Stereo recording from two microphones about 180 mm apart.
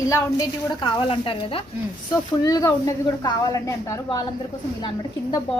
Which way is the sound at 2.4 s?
20° left (ahead or behind).